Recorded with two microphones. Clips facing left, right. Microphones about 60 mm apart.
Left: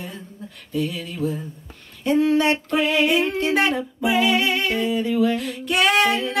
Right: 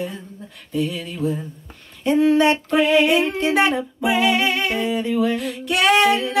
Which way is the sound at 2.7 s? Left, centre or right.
Centre.